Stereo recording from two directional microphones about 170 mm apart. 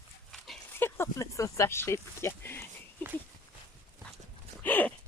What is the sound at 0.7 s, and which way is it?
Speech, 15° left (ahead or behind).